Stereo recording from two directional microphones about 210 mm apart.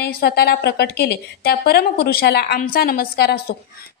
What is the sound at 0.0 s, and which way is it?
A woman's voice, 45° left (ahead or behind).